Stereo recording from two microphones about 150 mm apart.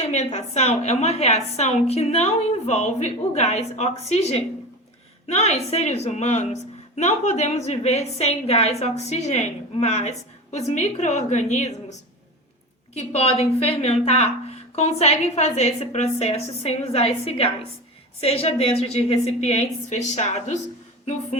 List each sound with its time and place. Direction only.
0.1 s a woman's voice: 45° left (ahead or behind)